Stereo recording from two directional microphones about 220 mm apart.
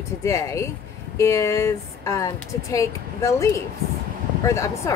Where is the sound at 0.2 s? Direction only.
15° left (ahead or behind).